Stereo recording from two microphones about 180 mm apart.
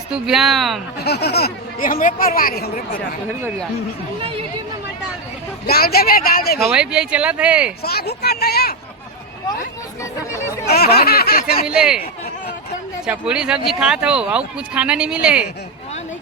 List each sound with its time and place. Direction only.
0.1 s speech: centre (ahead or behind)
1.0 s speech: 65° left (ahead or behind)
4.2 s chatter: 30° right (ahead or behind)
5.6 s speech: 60° left (ahead or behind)
6.6 s speech: 5° right (ahead or behind)
7.8 s speech: 60° left (ahead or behind)
10.7 s speech: 60° left (ahead or behind)
11.6 s speech: 5° right (ahead or behind)
13.1 s speech: 5° right (ahead or behind)